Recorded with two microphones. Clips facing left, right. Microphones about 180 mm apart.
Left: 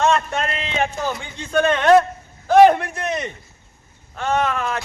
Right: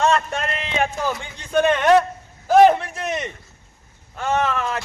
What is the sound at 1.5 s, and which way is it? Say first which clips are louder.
Speech: left 1 dB; 15° right (ahead or behind).